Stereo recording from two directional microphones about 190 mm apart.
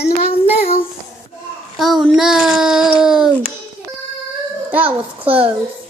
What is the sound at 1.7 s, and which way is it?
A child's voice, centre (ahead or behind).